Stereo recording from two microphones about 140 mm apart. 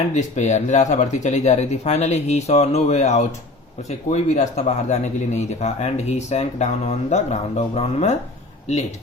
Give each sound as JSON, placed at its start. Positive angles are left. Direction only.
{"t": 0.1, "sound": "speech", "side_deg": 55}